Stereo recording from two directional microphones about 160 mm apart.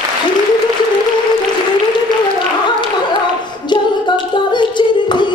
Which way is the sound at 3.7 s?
30° left (ahead or behind).